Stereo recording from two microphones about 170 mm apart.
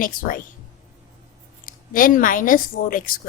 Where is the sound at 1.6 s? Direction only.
55° left (ahead or behind).